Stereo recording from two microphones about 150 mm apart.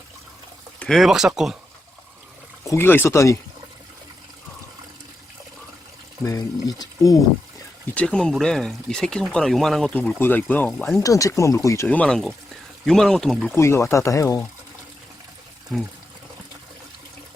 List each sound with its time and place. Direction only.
0.8 s speech: centre (ahead or behind)
2.6 s speech: 15° left (ahead or behind)
6.2 s speech: 25° left (ahead or behind)
7.9 s speech: 5° left (ahead or behind)
11.0 s speech: 20° left (ahead or behind)
11.9 s speech: 5° left (ahead or behind)
13.6 s speech: 15° left (ahead or behind)